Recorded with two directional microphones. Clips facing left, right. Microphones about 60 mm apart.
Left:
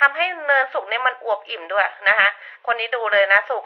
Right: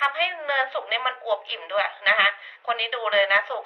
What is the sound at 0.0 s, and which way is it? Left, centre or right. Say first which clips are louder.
A woman's voice: left 6 dB; left.